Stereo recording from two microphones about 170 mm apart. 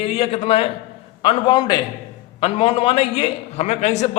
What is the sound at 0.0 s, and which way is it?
A man's voice, 35° left (ahead or behind).